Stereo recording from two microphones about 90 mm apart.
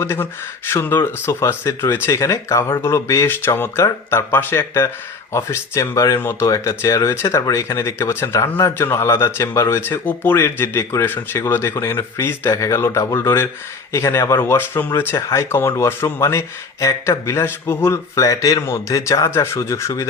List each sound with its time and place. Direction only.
0.0 s speech: 25° left (ahead or behind)
17.8 s speech: 40° left (ahead or behind)